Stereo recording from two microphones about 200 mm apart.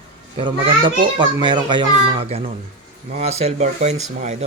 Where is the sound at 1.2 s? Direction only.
25° right (ahead or behind).